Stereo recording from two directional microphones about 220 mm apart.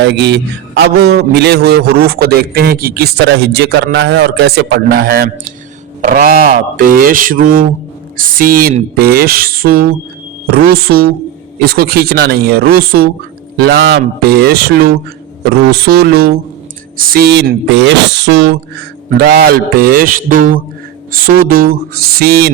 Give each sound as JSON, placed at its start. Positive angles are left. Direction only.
{"t": 0.0, "sound": "a man's voice", "side_deg": -50}